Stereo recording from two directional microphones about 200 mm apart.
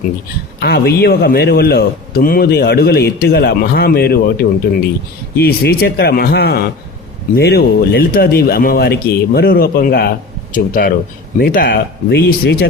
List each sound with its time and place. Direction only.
0.6 s a man's voice: 50° left (ahead or behind)